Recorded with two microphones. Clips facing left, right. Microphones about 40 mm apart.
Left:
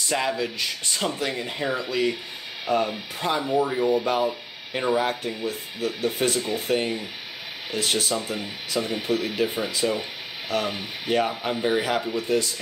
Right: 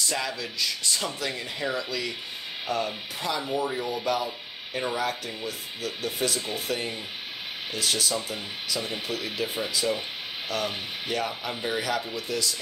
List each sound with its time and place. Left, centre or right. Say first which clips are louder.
0.1 s speech: left 6 dB; left